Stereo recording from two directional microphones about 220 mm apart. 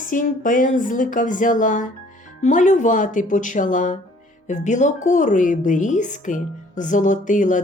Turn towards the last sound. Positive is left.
turn(degrees=35)  # may be behind; listen again after turning